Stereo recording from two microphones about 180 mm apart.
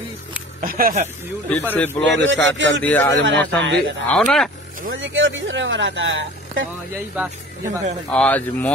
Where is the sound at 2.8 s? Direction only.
10° left (ahead or behind).